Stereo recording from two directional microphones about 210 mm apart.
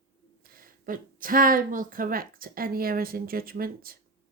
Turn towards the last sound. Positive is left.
turn(degrees=-45)  # may be behind; listen again after turning